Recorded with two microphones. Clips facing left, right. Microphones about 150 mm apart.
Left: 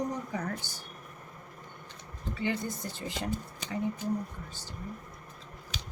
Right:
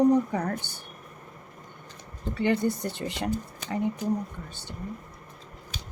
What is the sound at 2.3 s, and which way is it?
Speech, 65° right (ahead or behind).